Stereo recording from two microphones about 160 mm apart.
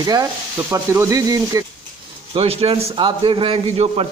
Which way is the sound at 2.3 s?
40° right (ahead or behind).